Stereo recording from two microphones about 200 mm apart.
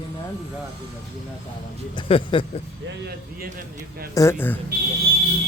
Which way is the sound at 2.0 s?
25° left (ahead or behind).